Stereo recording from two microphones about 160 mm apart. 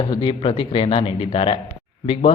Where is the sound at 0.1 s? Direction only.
30° left (ahead or behind).